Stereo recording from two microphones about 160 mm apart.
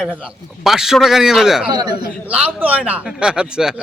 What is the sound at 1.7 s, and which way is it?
Speech, 25° right (ahead or behind).